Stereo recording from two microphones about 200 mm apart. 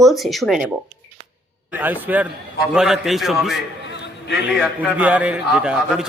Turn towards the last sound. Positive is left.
turn(degrees=-5)  # may be behind; listen again after turning